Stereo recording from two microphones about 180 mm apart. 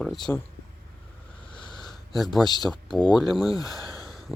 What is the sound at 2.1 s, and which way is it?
Speech, centre (ahead or behind).